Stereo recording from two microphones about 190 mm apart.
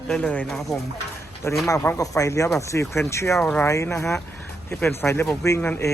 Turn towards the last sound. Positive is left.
turn(degrees=10)  # may be behind; listen again after turning